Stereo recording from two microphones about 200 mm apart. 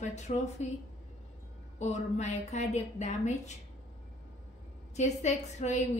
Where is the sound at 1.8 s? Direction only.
35° left (ahead or behind).